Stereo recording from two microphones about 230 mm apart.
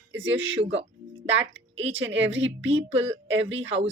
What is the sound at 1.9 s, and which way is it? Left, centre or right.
Speech, right.